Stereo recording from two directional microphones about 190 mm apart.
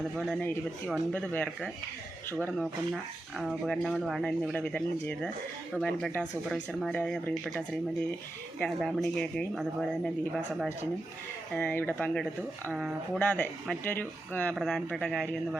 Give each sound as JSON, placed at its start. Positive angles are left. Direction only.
{"t": 0.2, "sound": "speech", "side_deg": 5}